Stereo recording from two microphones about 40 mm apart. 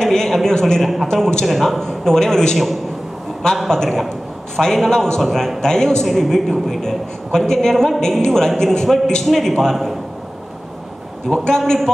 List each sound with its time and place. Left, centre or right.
0.0 s a sound: centre
1.0 s a woman's voice: centre
1.4 s a man's voice: centre
1.8 s a woman's voice: centre
3.6 s a woman's voice: centre
8.5 s a man's voice: centre
11.2 s a woman's voice: centre